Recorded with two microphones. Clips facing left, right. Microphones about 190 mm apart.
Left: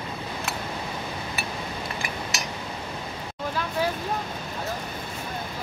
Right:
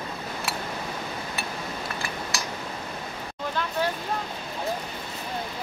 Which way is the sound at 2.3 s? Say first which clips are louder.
Even; 20° left (ahead or behind).